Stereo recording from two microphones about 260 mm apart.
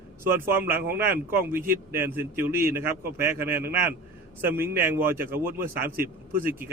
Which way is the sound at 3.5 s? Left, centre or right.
Right.